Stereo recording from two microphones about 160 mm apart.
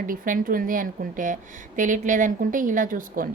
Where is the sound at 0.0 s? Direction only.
60° right (ahead or behind).